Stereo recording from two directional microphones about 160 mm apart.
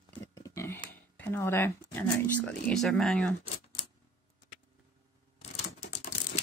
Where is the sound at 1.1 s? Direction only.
15° left (ahead or behind).